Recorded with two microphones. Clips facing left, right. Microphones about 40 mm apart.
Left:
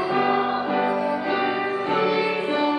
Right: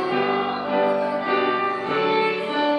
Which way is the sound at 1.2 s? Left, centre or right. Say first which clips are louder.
Right 2 dB; right.